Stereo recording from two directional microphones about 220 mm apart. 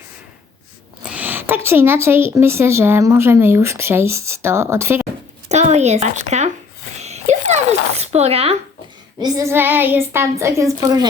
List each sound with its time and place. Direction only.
1.0 s speech: 5° right (ahead or behind)
5.5 s a woman's voice: 30° right (ahead or behind)
7.0 s a sound: 30° right (ahead or behind)
7.9 s speech: 30° right (ahead or behind)
9.1 s speech: 15° right (ahead or behind)